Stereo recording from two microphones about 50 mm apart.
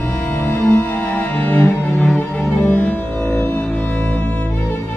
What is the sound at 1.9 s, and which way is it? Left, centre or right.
Music, centre.